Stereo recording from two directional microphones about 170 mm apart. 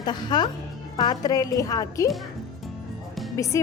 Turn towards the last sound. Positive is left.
turn(degrees=20)  # may be behind; listen again after turning